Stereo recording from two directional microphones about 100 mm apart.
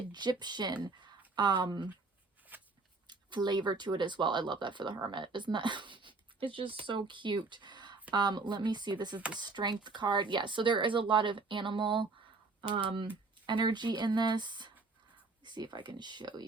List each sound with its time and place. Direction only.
0.1 s speech: 45° right (ahead or behind)
2.5 s a sound: 20° right (ahead or behind)
3.1 s speech: 45° right (ahead or behind)
9.1 s speech: 10° right (ahead or behind)
9.4 s speech: 45° right (ahead or behind); by 13.1 s 60° right (ahead or behind)
13.5 s speech: 50° right (ahead or behind)